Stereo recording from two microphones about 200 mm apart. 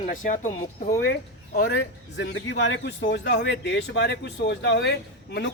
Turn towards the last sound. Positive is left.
turn(degrees=60)  # may be behind; listen again after turning